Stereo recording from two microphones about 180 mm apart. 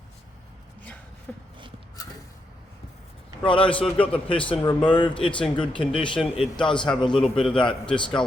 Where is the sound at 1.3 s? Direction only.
5° left (ahead or behind).